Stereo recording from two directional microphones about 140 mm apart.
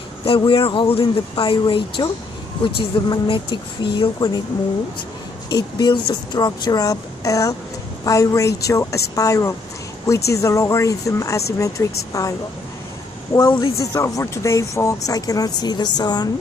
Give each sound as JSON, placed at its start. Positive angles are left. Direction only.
{"t": 0.4, "sound": "speech", "side_deg": 35}
{"t": 5.6, "sound": "speech", "side_deg": 30}